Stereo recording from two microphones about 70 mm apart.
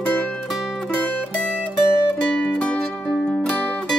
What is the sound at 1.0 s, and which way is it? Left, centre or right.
Music, centre.